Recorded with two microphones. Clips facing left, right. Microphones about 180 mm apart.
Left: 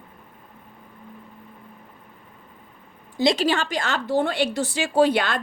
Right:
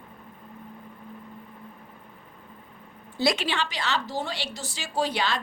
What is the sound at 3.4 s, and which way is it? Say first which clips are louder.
A woman's voice: left 7 dB; 45° left (ahead or behind).